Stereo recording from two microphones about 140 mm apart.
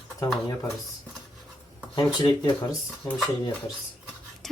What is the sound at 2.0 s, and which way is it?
Speech, 30° left (ahead or behind).